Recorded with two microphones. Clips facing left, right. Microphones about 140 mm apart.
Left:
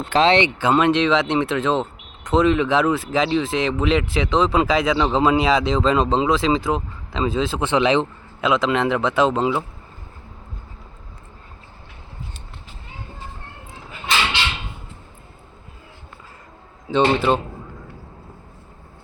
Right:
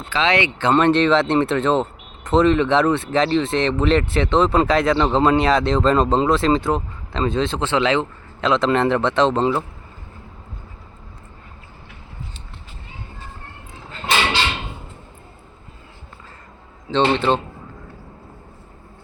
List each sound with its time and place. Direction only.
0.3 s speech: 25° left (ahead or behind)
0.6 s speech: 5° left (ahead or behind)
7.6 s a man's voice: 15° left (ahead or behind)
8.4 s speech: 5° left (ahead or behind)
16.9 s a man's voice: 10° left (ahead or behind)